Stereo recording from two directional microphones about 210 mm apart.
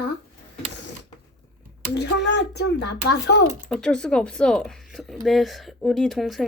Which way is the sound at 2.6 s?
50° left (ahead or behind).